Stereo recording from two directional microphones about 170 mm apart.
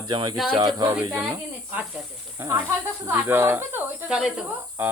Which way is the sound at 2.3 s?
15° right (ahead or behind).